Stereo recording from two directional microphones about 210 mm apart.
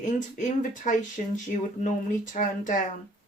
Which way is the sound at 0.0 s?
35° left (ahead or behind).